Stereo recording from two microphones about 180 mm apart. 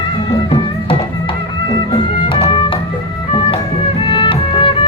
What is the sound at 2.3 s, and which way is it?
Music, 30° left (ahead or behind).